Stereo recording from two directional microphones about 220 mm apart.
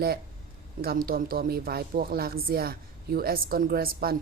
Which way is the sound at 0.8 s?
40° right (ahead or behind).